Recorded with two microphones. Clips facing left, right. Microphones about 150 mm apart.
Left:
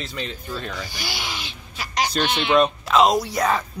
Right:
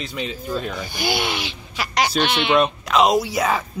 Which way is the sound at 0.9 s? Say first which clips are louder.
Right 8 dB; 55° right (ahead or behind).